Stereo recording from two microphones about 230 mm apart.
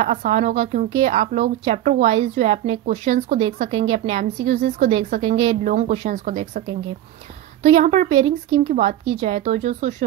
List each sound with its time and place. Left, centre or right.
0.0 s speech: right
7.7 s speech: right